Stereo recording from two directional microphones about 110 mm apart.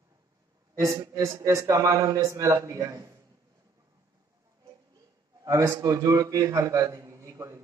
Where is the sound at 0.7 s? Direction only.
30° right (ahead or behind).